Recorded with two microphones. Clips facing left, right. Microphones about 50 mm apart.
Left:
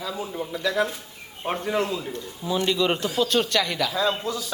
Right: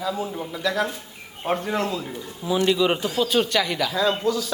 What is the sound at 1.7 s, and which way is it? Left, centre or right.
Speech, centre.